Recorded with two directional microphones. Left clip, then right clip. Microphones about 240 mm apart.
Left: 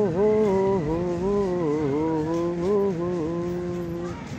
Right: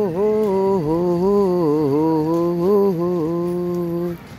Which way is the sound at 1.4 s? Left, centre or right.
Right.